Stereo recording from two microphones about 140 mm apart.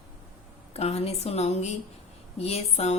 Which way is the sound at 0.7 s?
50° left (ahead or behind).